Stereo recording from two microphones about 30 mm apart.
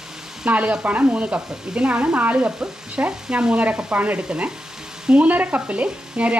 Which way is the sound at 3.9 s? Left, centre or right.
Right.